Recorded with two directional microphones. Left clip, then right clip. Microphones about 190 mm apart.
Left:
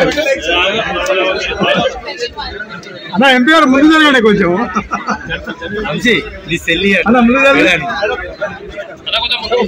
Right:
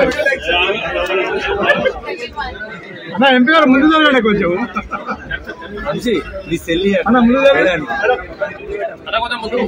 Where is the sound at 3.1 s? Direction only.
45° left (ahead or behind).